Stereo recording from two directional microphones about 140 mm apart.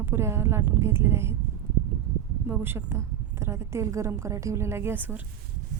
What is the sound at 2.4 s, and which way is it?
A woman's voice, 15° right (ahead or behind).